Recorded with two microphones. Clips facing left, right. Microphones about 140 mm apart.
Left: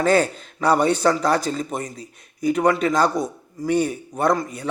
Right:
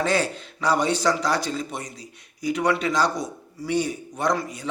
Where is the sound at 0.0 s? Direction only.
45° left (ahead or behind).